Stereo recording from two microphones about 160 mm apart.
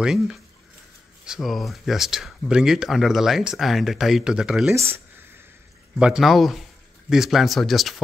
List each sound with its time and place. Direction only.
0.0 s speech: 5° right (ahead or behind)
4.7 s speech: 15° right (ahead or behind)
5.9 s speech: 5° right (ahead or behind)